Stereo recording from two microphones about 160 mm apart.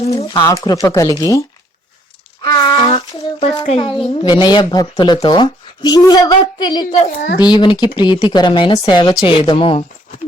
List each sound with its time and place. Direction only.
0.0 s a woman's voice: 20° left (ahead or behind)